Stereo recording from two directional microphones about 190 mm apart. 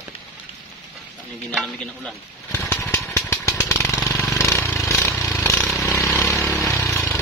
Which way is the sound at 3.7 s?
15° left (ahead or behind).